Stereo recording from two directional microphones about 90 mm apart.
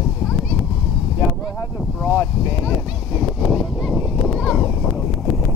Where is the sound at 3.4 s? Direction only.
Centre (ahead or behind).